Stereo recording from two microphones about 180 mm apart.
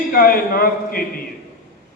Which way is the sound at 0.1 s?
55° left (ahead or behind).